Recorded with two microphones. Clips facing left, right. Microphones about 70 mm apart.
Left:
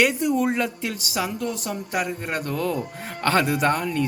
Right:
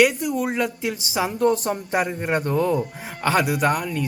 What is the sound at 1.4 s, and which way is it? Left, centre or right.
Speech, right.